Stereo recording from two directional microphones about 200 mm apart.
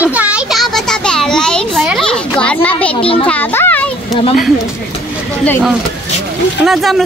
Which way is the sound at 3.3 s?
10° left (ahead or behind).